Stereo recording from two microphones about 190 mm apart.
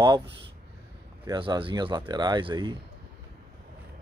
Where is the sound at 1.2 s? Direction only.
25° right (ahead or behind).